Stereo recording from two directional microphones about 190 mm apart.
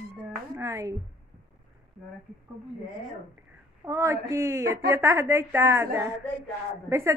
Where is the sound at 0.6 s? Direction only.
15° right (ahead or behind).